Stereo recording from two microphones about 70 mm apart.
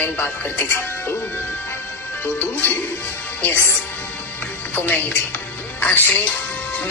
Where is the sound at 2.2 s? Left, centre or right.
Left.